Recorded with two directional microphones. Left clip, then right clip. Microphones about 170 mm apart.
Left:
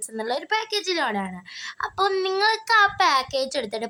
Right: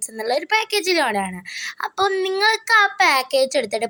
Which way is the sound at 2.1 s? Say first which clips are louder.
Right 3 dB; 5° right (ahead or behind).